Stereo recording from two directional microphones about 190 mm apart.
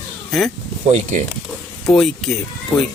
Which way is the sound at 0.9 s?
40° right (ahead or behind).